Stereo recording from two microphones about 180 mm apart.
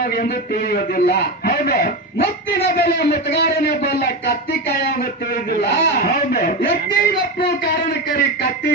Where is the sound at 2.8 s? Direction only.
65° left (ahead or behind).